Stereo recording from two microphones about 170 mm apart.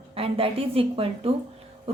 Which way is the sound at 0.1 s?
35° right (ahead or behind).